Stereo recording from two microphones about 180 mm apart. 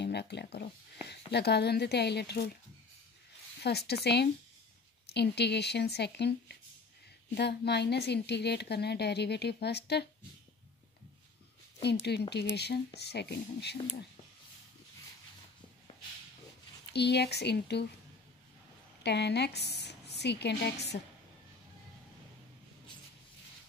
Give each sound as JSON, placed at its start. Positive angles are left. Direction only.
{"t": 0.0, "sound": "a woman's voice", "side_deg": 70}
{"t": 3.6, "sound": "a woman's voice", "side_deg": 65}
{"t": 11.8, "sound": "a woman's voice", "side_deg": 65}
{"t": 16.9, "sound": "a woman's voice", "side_deg": 70}
{"t": 19.0, "sound": "a woman's voice", "side_deg": 70}
{"t": 20.9, "sound": "a woman's voice", "side_deg": 50}